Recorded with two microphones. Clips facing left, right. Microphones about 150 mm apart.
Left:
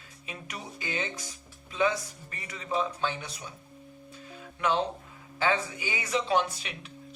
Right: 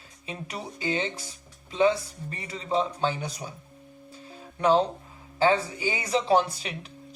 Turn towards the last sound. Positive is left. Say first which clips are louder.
# right 5 dB
turn(degrees=-35)  # may be behind; listen again after turning